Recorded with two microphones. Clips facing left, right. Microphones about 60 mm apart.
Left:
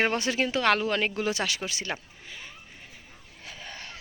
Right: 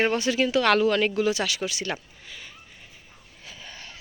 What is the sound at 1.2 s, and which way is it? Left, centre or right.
Speech, left.